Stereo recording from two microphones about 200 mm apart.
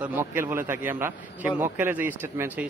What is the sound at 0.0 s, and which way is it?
Speech, 10° right (ahead or behind).